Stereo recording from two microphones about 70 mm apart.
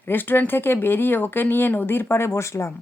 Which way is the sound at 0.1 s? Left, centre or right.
Left.